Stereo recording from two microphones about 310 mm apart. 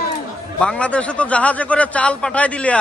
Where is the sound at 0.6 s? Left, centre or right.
Centre.